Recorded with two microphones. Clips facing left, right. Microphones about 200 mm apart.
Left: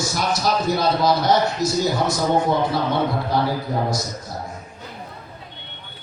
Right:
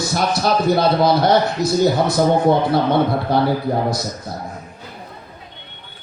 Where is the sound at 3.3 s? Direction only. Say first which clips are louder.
Right 4 dB; 60° right (ahead or behind).